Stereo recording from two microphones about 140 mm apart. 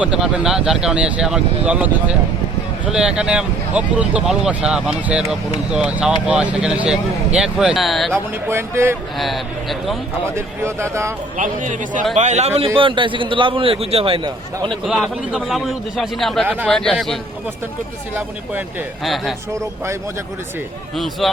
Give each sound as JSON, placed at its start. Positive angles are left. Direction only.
{"t": 0.0, "sound": "a man's voice", "side_deg": -5}
{"t": 8.1, "sound": "speech", "side_deg": -20}
{"t": 9.1, "sound": "a man's voice", "side_deg": 0}
{"t": 10.3, "sound": "speech", "side_deg": -20}
{"t": 11.3, "sound": "a man's voice", "side_deg": -65}
{"t": 12.7, "sound": "a man's voice", "side_deg": -35}
{"t": 14.8, "sound": "a man's voice", "side_deg": -5}
{"t": 19.0, "sound": "a man's voice", "side_deg": 0}
{"t": 20.9, "sound": "a man's voice", "side_deg": 0}